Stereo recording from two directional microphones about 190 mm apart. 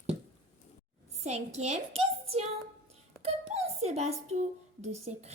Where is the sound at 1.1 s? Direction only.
35° right (ahead or behind).